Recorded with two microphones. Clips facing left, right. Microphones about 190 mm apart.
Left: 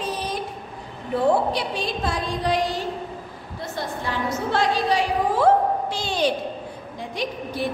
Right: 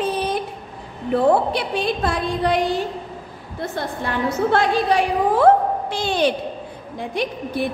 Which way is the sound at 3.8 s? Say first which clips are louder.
Right 3 dB; 55° right (ahead or behind).